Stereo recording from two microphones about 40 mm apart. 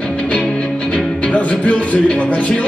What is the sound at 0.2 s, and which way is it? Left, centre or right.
Music, left.